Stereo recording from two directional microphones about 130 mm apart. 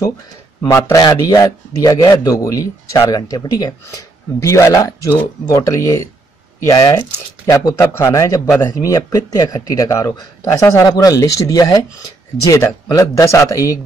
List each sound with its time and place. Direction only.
0.6 s a man's voice: 25° left (ahead or behind)